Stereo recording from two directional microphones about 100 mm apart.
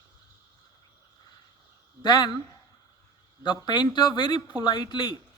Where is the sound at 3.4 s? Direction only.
50° left (ahead or behind).